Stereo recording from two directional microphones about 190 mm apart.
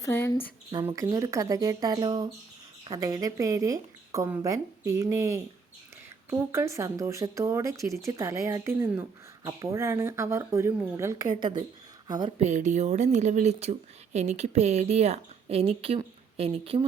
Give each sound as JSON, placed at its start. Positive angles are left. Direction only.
{"t": 0.0, "sound": "speech", "side_deg": 10}
{"t": 0.7, "sound": "speech", "side_deg": -20}
{"t": 12.4, "sound": "speech", "side_deg": -40}